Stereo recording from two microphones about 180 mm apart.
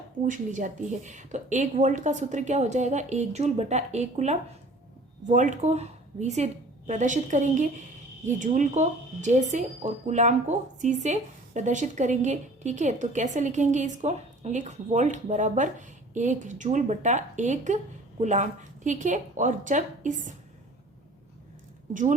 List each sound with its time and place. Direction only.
0.3 s a woman's voice: 45° right (ahead or behind)